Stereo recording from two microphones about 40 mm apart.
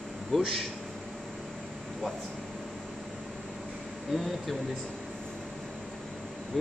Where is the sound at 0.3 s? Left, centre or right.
Centre.